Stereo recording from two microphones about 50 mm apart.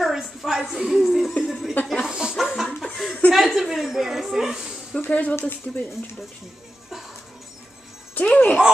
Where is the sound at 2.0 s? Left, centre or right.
Centre.